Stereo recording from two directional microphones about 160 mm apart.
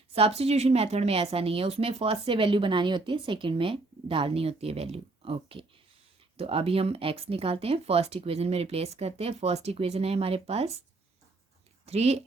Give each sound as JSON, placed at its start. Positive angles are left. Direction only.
{"t": 0.1, "sound": "a woman's voice", "side_deg": -40}
{"t": 11.9, "sound": "a woman's voice", "side_deg": -40}